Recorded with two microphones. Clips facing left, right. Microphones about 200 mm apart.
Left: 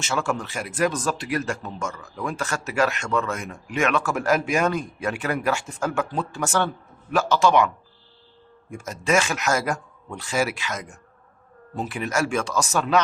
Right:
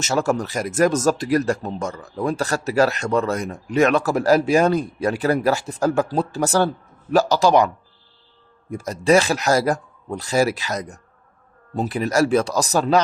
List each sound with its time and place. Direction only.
0.0 s speech: 40° right (ahead or behind)
8.7 s speech: 35° right (ahead or behind)